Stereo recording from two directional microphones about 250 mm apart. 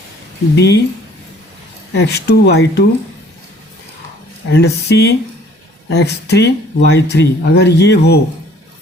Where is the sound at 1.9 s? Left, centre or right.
Left.